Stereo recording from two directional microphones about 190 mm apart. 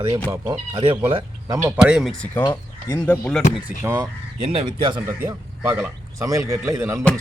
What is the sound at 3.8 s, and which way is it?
Speech, 15° right (ahead or behind).